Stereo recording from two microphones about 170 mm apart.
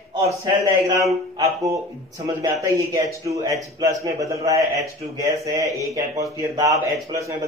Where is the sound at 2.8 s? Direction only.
20° right (ahead or behind).